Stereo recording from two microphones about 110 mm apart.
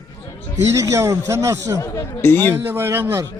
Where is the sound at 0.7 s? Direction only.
25° right (ahead or behind).